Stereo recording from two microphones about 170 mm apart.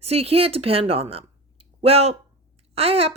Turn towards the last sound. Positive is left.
turn(degrees=-35)  # may be behind; listen again after turning